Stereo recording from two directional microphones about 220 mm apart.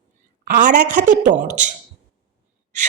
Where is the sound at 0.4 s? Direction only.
35° right (ahead or behind).